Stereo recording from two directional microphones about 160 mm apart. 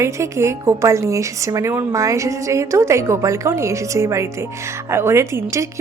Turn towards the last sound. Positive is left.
turn(degrees=-15)  # may be behind; listen again after turning